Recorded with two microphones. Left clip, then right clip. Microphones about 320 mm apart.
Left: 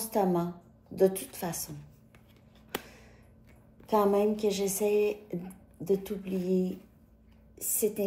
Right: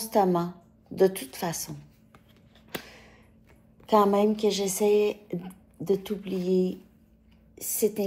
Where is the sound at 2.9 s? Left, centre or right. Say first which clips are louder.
Right 4 dB; centre.